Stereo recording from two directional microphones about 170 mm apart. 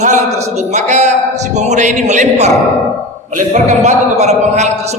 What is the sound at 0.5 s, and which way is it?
A woman's voice, 45° right (ahead or behind).